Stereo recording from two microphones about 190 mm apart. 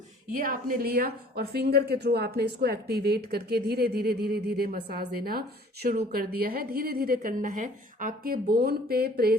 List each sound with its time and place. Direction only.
0.3 s a woman's voice: 45° right (ahead or behind)